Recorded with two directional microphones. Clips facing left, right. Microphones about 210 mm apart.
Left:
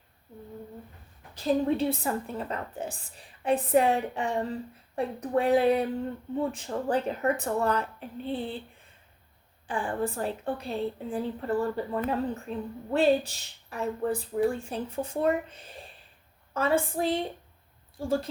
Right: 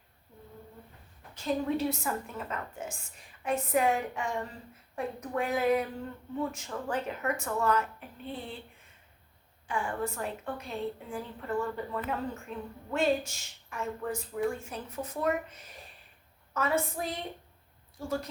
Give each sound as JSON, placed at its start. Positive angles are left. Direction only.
{"t": 1.4, "sound": "a woman's voice", "side_deg": 30}
{"t": 9.6, "sound": "a woman's voice", "side_deg": 30}